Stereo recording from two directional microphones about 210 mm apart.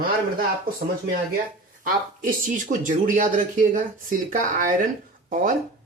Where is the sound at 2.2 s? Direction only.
40° right (ahead or behind).